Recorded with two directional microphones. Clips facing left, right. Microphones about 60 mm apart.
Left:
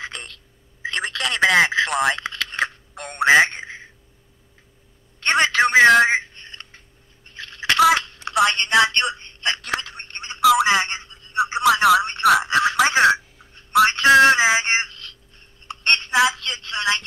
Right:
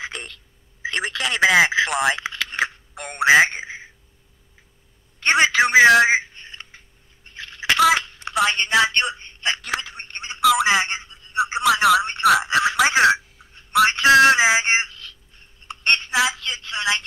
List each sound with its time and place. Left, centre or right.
0.9 s radio: centre
5.2 s telephone: centre
7.2 s a sound: centre
8.5 s speech: centre
8.9 s telephone: centre
9.8 s a sound: centre
10.4 s telephone: centre
10.7 s telephone: centre
11.6 s telephone: centre
13.8 s a sound: centre
14.4 s a sound: centre
16.2 s telephone: centre